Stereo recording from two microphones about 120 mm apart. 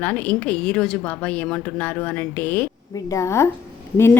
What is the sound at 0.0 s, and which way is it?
A woman's voice, 15° left (ahead or behind).